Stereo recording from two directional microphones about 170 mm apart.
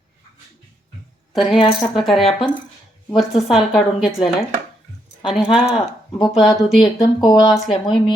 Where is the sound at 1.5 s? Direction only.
30° left (ahead or behind).